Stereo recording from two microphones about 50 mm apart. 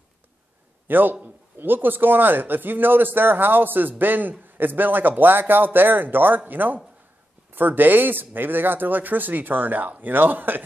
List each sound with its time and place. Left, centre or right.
0.8 s a man's voice: right